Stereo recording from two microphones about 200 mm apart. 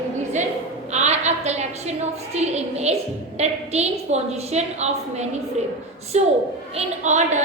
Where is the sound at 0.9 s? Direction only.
35° right (ahead or behind).